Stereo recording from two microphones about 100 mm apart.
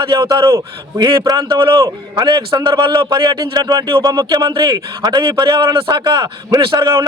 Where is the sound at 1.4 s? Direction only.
50° right (ahead or behind).